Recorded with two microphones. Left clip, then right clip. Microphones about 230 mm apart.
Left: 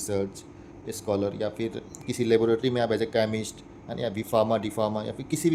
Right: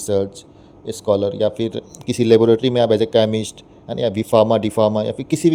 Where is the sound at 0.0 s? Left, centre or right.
Right.